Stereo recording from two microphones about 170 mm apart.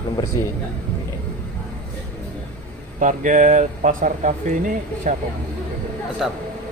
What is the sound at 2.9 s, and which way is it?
Speech, 50° right (ahead or behind).